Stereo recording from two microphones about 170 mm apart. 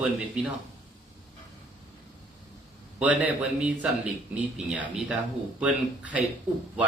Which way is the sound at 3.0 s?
10° right (ahead or behind).